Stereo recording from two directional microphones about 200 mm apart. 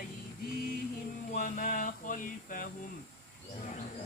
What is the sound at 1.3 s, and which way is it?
Mantra, 45° left (ahead or behind).